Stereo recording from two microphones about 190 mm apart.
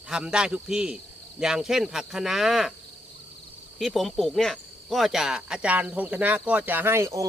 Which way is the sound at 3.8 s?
Centre (ahead or behind).